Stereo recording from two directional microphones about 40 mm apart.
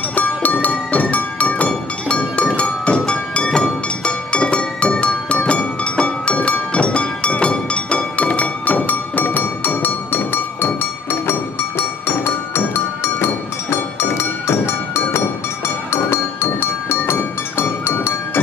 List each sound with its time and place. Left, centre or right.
0.1 s music: left
12.3 s music: left